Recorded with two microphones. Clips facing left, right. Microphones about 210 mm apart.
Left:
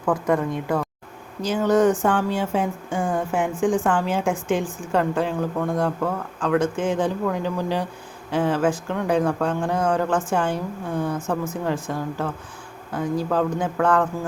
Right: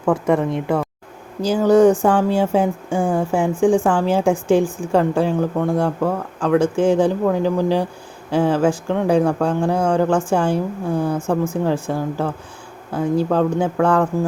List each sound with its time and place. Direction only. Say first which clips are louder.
0.0 s a woman's voice: right 4 dB; 25° right (ahead or behind)